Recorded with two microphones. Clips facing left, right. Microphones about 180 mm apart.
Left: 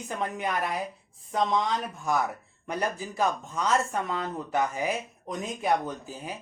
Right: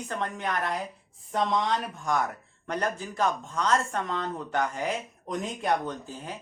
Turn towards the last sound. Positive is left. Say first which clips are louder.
# even
turn(degrees=10)  # may be behind; listen again after turning